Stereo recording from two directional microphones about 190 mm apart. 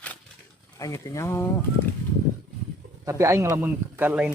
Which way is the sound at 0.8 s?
15° left (ahead or behind).